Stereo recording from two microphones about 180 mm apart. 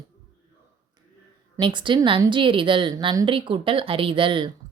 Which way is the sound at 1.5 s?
25° right (ahead or behind).